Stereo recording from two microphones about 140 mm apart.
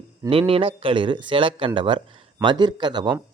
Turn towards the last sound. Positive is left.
turn(degrees=-30)  # may be behind; listen again after turning